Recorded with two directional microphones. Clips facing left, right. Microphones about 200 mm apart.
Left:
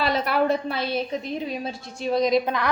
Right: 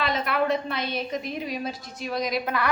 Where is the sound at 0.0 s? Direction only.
35° left (ahead or behind).